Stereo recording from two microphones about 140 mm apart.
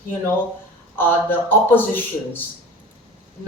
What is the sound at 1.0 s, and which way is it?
A man's voice, 15° left (ahead or behind).